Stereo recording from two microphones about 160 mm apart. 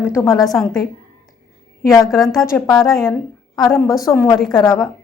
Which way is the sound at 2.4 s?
20° left (ahead or behind).